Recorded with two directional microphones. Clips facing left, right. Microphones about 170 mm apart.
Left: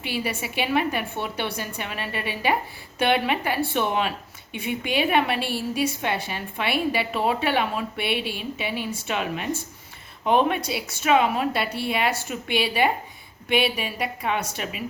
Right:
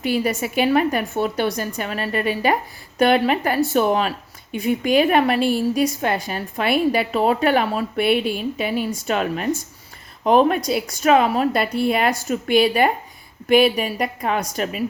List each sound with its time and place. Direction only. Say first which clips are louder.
0.0 s a woman's voice: right 8 dB; 45° right (ahead or behind)